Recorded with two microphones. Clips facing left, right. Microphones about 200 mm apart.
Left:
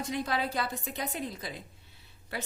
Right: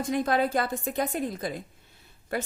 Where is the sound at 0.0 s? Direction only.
50° right (ahead or behind).